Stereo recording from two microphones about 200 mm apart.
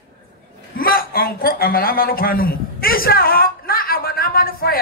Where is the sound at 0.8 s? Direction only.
45° left (ahead or behind).